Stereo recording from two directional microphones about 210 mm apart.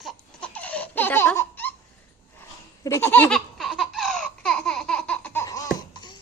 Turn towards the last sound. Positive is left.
turn(degrees=15)  # may be behind; listen again after turning